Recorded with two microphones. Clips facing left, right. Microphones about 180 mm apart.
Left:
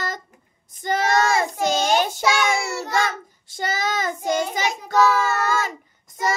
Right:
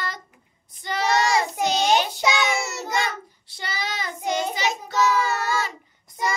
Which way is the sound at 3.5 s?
45° left (ahead or behind).